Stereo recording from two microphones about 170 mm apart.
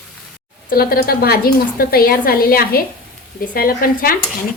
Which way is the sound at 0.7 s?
60° left (ahead or behind).